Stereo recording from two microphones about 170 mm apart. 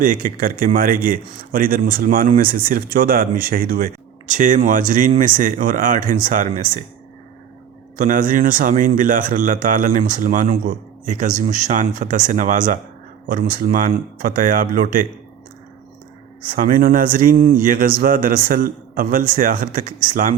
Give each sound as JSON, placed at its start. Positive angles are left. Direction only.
{"t": 0.0, "sound": "a man's voice", "side_deg": -55}
{"t": 7.9, "sound": "a man's voice", "side_deg": -50}
{"t": 16.5, "sound": "a man's voice", "side_deg": -55}